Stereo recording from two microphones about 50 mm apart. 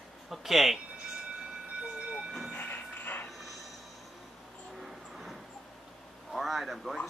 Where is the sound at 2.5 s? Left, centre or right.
Left.